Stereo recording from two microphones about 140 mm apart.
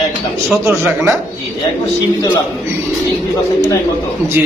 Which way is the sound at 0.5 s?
15° right (ahead or behind).